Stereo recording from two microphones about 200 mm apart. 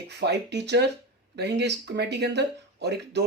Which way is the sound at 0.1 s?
55° right (ahead or behind).